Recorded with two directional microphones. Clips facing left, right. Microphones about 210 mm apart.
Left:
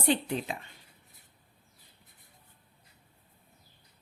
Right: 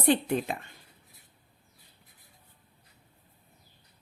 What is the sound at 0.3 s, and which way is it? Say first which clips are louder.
Speech: right 4 dB; 50° right (ahead or behind).